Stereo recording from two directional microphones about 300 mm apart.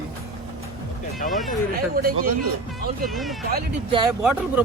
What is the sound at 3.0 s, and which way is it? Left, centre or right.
Speech, centre.